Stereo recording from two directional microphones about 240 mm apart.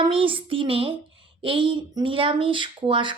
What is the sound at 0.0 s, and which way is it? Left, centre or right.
A woman's voice, right.